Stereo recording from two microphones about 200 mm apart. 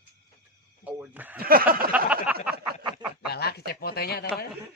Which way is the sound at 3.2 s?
55° left (ahead or behind).